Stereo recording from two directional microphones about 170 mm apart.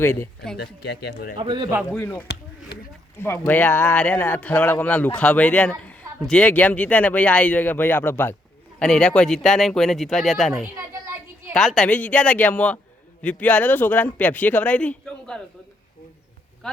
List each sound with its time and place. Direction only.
0.0 s speech: 15° left (ahead or behind)
0.5 s speech: 75° left (ahead or behind)
1.4 s a man's voice: 30° right (ahead or behind)
2.0 s speech: 10° left (ahead or behind)
10.8 s a sound: 15° right (ahead or behind)
11.5 s speech: centre (ahead or behind)